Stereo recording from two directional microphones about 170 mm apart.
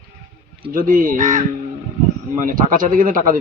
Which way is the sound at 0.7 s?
55° right (ahead or behind).